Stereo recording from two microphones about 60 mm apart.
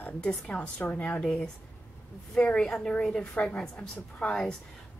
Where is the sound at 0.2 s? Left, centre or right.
Centre.